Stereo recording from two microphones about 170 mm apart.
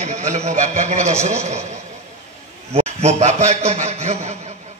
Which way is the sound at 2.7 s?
40° right (ahead or behind).